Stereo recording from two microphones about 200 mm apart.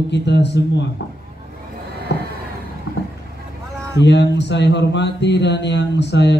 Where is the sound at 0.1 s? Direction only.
60° left (ahead or behind).